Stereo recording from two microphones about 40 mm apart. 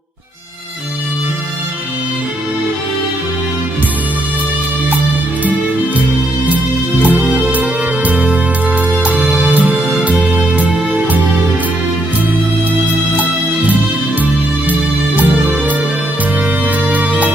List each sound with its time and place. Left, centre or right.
7.1 s music: right
14.7 s music: right